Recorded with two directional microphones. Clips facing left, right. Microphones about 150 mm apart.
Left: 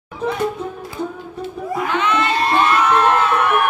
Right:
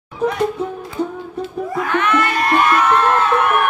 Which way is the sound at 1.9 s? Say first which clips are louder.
Right 1 dB; 20° left (ahead or behind).